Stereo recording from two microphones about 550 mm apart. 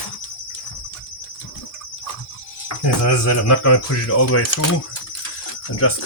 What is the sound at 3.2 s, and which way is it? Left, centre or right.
Speech, left.